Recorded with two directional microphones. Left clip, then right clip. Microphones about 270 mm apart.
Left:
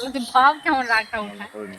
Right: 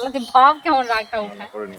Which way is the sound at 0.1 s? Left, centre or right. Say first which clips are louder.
Right 3 dB; right.